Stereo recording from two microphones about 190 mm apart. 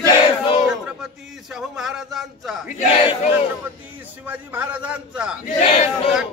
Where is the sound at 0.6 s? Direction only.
Centre (ahead or behind).